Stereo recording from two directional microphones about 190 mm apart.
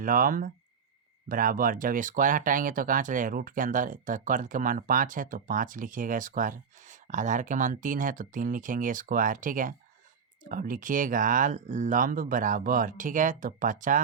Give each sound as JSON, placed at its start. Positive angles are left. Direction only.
{"t": 0.0, "sound": "speech", "side_deg": -45}